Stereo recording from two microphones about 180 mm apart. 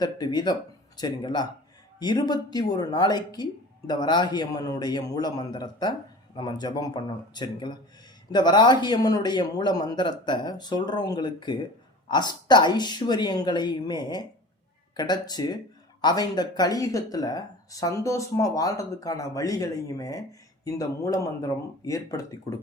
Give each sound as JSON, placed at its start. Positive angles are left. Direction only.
{"t": 0.0, "sound": "speech", "side_deg": 25}